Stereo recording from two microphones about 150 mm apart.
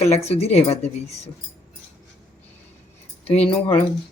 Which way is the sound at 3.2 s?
40° left (ahead or behind).